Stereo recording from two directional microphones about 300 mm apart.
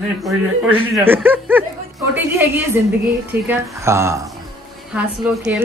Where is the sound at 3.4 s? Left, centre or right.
Centre.